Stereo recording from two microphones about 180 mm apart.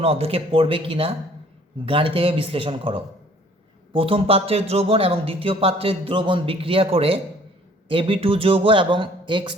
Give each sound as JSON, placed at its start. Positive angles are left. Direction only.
{"t": 0.0, "sound": "speech", "side_deg": -35}